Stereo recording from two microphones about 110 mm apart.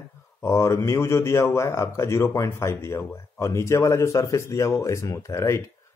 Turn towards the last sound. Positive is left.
turn(degrees=25)  # may be behind; listen again after turning